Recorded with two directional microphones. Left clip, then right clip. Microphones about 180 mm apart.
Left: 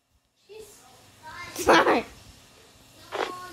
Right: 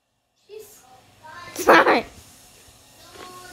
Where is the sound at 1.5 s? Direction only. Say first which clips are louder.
Right 5 dB; 15° right (ahead or behind).